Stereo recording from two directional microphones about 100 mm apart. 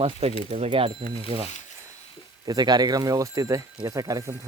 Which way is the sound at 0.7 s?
65° right (ahead or behind).